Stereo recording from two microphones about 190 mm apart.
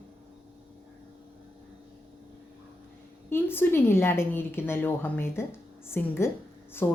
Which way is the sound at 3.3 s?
10° left (ahead or behind).